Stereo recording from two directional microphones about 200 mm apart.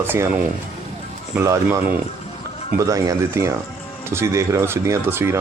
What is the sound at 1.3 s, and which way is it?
Speech, 10° right (ahead or behind).